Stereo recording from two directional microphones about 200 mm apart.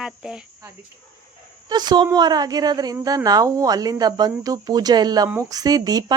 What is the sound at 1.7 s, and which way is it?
A woman's voice, 20° right (ahead or behind).